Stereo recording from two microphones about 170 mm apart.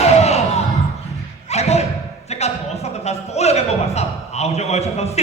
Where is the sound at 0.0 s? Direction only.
40° left (ahead or behind).